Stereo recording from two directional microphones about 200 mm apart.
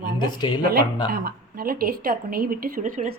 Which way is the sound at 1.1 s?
50° right (ahead or behind).